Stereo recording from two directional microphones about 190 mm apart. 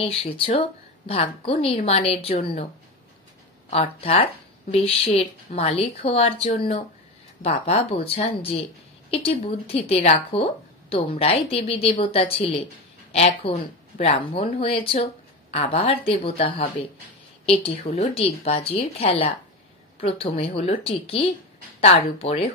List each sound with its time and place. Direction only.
0.6 s speech: 30° left (ahead or behind)
3.7 s speech: 30° left (ahead or behind)